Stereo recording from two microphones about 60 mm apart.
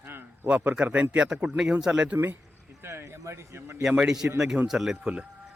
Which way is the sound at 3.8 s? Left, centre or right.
Centre.